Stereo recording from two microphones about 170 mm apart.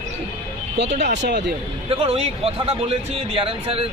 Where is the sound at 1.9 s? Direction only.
35° right (ahead or behind).